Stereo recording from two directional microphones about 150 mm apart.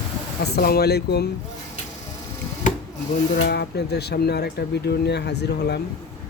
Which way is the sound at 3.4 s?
90° left.